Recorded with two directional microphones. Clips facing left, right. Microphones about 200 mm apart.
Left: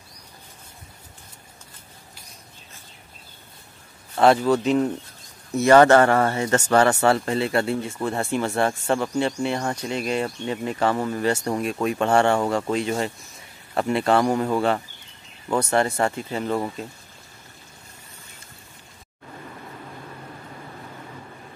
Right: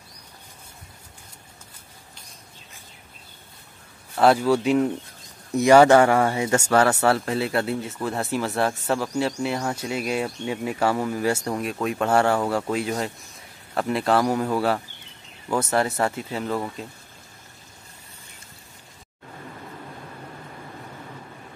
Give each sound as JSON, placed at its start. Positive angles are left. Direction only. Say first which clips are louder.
{"t": 4.2, "sound": "speech", "louder": "left 1 dB", "side_deg": -5}